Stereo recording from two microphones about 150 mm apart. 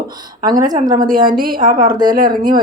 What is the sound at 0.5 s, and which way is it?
A woman's voice, 60° right (ahead or behind).